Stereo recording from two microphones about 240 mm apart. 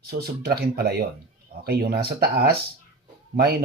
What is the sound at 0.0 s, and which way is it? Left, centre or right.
Speech, right.